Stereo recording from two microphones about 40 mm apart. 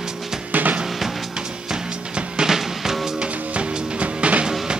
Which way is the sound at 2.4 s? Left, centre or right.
Centre.